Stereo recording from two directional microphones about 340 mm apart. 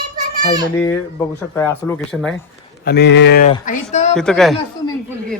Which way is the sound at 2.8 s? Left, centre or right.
Left.